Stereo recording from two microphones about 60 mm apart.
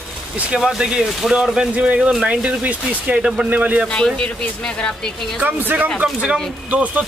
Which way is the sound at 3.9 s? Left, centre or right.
Centre.